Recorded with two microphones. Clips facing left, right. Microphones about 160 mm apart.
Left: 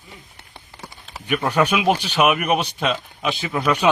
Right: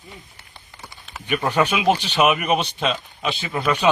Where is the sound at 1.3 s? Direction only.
5° left (ahead or behind).